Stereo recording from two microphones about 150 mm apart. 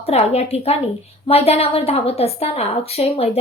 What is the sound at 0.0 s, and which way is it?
A woman's voice, 45° left (ahead or behind).